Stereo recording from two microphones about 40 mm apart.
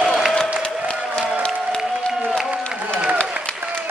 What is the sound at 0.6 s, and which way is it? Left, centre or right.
Applause, left.